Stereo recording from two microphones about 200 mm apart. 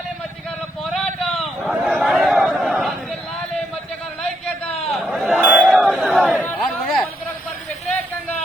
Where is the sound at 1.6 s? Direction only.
5° right (ahead or behind).